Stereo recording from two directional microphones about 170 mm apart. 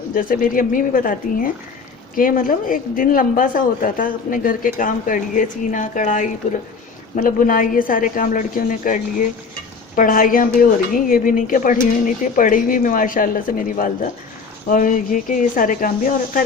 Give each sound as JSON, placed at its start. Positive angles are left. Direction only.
{"t": 0.1, "sound": "a woman's voice", "side_deg": 55}